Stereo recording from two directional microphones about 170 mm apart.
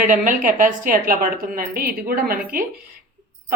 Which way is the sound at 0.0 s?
55° right (ahead or behind).